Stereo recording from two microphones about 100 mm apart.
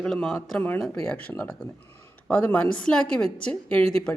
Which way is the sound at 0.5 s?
15° left (ahead or behind).